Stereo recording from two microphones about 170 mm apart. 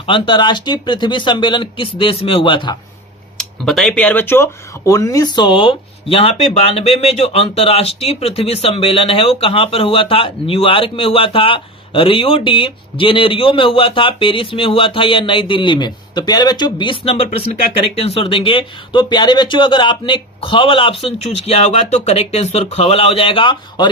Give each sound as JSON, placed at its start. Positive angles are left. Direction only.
{"t": 0.1, "sound": "speech", "side_deg": 30}
{"t": 3.3, "sound": "a man's voice", "side_deg": 0}